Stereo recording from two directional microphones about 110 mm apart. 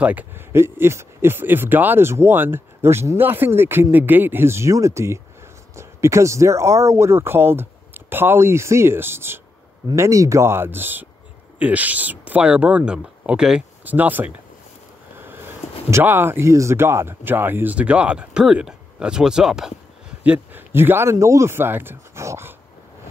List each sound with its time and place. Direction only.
0.0 s speech: 15° right (ahead or behind)
20.2 s speech: 20° right (ahead or behind)